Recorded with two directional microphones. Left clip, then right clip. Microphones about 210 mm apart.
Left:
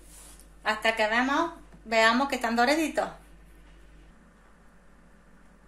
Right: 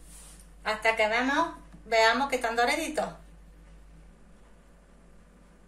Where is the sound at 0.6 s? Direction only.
35° left (ahead or behind).